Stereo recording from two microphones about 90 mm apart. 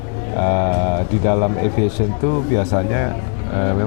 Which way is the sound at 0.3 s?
20° left (ahead or behind).